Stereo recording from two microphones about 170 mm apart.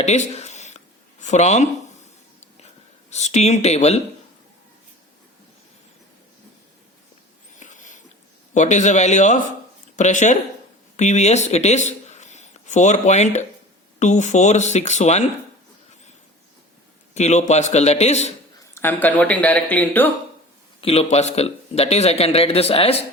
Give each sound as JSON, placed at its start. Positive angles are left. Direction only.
{"t": 0.0, "sound": "a sound", "side_deg": 40}
{"t": 1.2, "sound": "speech", "side_deg": 45}
{"t": 3.1, "sound": "a man's voice", "side_deg": 40}
{"t": 7.5, "sound": "a sound", "side_deg": 50}
{"t": 8.5, "sound": "speech", "side_deg": 45}
{"t": 17.2, "sound": "a man's voice", "side_deg": 40}
{"t": 18.7, "sound": "speech", "side_deg": 10}
{"t": 20.8, "sound": "a man's voice", "side_deg": 35}